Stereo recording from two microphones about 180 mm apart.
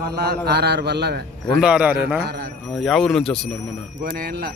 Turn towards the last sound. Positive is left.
turn(degrees=-55)  # may be behind; listen again after turning